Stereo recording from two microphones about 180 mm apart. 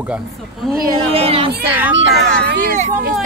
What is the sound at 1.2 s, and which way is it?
Speech, 30° right (ahead or behind).